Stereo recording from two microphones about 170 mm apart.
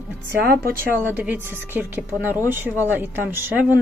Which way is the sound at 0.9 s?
10° right (ahead or behind).